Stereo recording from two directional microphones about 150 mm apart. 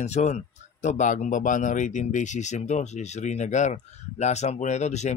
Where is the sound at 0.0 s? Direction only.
50° left (ahead or behind).